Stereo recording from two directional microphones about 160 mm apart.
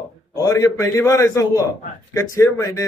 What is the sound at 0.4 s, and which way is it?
A man's voice, 20° left (ahead or behind).